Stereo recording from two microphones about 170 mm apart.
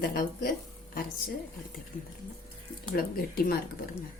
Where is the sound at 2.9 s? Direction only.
60° left (ahead or behind).